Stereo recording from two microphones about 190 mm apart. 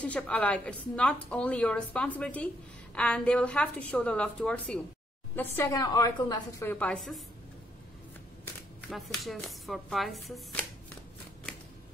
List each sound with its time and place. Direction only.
0.0 s a woman's voice: 5° left (ahead or behind); by 6.4 s 20° left (ahead or behind)
6.6 s a woman's voice: 10° left (ahead or behind)
8.8 s a woman's voice: centre (ahead or behind)